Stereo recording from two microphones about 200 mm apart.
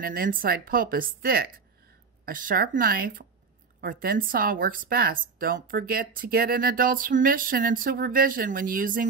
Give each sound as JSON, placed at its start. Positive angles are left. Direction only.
{"t": 0.0, "sound": "speech", "side_deg": -45}